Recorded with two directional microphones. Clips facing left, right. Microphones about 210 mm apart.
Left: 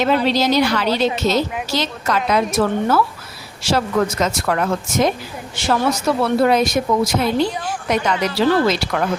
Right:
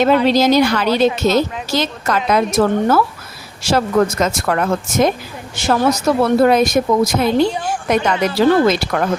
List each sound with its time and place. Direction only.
0.0 s speech: 45° right (ahead or behind)